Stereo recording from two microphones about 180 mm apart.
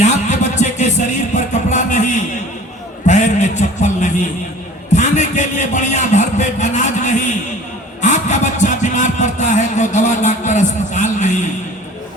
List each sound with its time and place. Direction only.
0.0 s music: 40° left (ahead or behind)
3.1 s a sound: 40° left (ahead or behind)
8.0 s vehicle: 40° left (ahead or behind)